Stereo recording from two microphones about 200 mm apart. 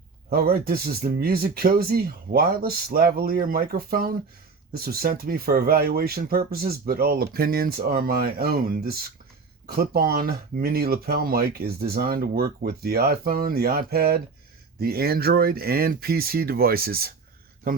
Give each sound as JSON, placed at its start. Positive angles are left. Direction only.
{"t": 0.3, "sound": "speech", "side_deg": -50}